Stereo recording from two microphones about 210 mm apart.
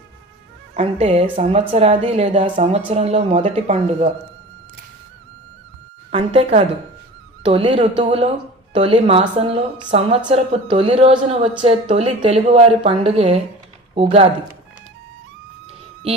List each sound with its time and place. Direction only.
0.7 s a woman's voice: 30° right (ahead or behind)
6.1 s a woman's voice: 30° right (ahead or behind)